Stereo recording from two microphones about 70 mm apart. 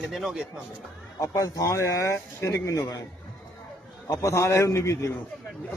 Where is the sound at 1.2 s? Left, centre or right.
Left.